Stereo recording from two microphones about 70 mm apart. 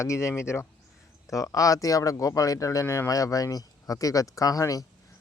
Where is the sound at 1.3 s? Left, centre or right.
Left.